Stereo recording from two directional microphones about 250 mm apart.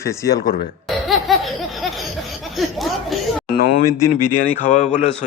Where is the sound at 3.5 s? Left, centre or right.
Left.